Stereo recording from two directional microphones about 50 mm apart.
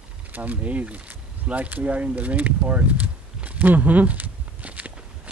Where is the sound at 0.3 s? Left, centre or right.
Right.